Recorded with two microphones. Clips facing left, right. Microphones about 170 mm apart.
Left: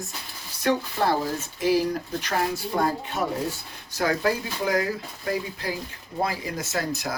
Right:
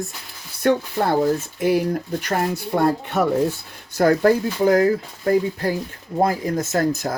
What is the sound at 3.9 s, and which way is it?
Speech, 55° right (ahead or behind).